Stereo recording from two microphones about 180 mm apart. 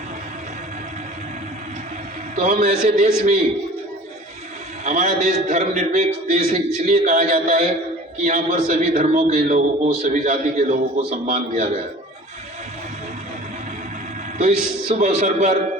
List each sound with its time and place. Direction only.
2.3 s a man's voice: 40° right (ahead or behind)
4.9 s a man's voice: 40° right (ahead or behind)
14.3 s a man's voice: 40° right (ahead or behind)